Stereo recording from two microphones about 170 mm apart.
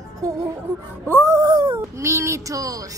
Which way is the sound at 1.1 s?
15° right (ahead or behind).